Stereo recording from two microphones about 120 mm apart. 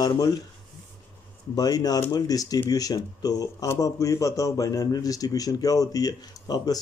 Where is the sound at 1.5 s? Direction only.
30° left (ahead or behind).